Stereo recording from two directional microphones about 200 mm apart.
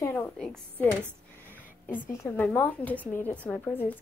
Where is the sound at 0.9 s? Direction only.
10° right (ahead or behind).